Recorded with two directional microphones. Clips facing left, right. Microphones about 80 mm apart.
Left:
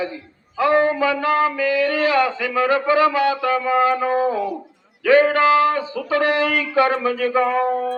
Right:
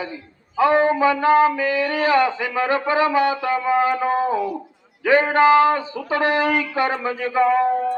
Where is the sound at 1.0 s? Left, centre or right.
Right.